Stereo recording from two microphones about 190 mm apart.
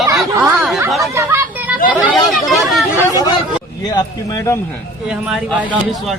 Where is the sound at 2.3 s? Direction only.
Centre (ahead or behind).